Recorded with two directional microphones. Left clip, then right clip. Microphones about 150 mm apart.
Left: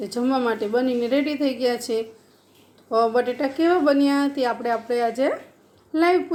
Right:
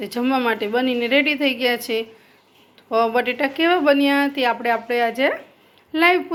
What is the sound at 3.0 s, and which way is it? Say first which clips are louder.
Speech: right 1 dB; 35° right (ahead or behind).